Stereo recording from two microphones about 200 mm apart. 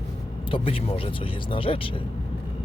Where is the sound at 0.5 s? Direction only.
30° left (ahead or behind).